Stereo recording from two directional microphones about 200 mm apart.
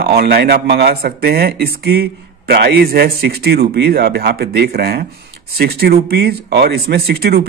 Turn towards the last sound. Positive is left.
turn(degrees=-50)  # may be behind; listen again after turning